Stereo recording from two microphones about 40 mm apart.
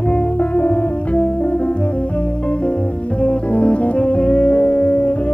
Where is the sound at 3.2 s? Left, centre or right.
Left.